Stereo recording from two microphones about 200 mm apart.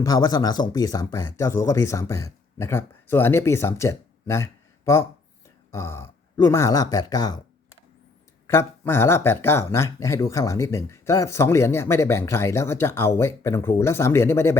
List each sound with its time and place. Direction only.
0.0 s speech: 20° left (ahead or behind)
5.7 s speech: 15° left (ahead or behind)
8.4 s speech: 10° left (ahead or behind)